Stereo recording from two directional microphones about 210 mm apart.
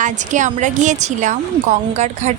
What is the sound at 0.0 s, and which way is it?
Speech, 35° right (ahead or behind).